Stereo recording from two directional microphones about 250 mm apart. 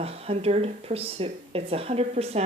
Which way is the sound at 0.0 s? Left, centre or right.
Right.